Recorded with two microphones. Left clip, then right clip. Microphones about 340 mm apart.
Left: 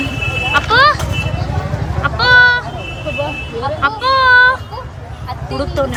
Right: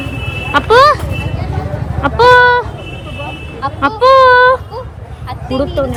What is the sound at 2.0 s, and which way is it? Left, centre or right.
Speech, centre.